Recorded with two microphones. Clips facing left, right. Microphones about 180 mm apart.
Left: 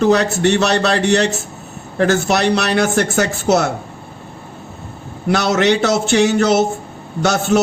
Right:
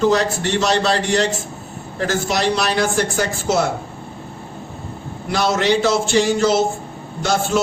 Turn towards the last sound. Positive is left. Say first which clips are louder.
# left 4 dB
turn(degrees=70)  # may be behind; listen again after turning